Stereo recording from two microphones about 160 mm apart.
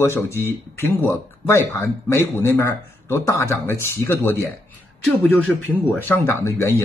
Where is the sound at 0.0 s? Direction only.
15° left (ahead or behind).